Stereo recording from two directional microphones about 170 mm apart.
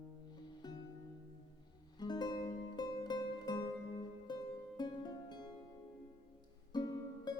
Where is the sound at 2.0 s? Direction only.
25° left (ahead or behind).